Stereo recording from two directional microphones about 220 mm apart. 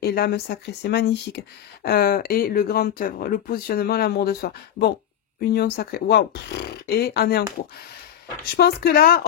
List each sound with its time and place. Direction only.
0.0 s speech: 45° left (ahead or behind)
8.5 s speech: 45° left (ahead or behind)